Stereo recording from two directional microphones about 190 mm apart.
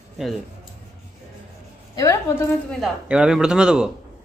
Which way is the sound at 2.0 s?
15° left (ahead or behind).